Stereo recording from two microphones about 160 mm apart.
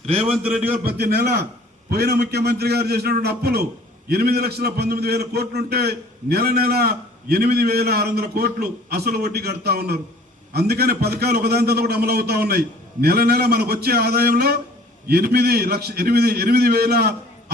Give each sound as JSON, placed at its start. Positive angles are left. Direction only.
{"t": 0.0, "sound": "a man's voice", "side_deg": -40}
{"t": 0.9, "sound": "a man's voice", "side_deg": -85}